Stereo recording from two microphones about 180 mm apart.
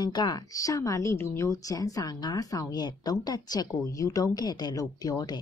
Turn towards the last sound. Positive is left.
turn(degrees=20)  # may be behind; listen again after turning